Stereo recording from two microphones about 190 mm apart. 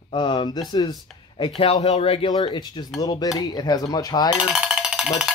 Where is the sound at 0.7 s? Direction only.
20° left (ahead or behind).